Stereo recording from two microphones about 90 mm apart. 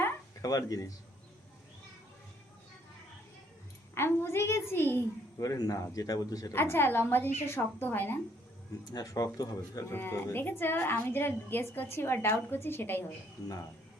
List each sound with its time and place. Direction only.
0.4 s a man's voice: 45° left (ahead or behind)
3.9 s a woman's voice: 25° left (ahead or behind)
5.4 s a man's voice: 45° left (ahead or behind)
6.5 s a woman's voice: 25° left (ahead or behind)
8.9 s speech: 40° left (ahead or behind)
9.9 s a woman's voice: 25° left (ahead or behind)